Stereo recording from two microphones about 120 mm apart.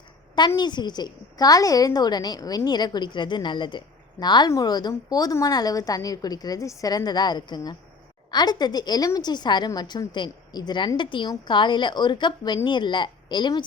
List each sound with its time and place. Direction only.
0.3 s a woman's voice: 35° left (ahead or behind)